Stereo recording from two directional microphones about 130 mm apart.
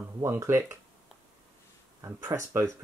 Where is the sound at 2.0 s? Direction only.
20° right (ahead or behind).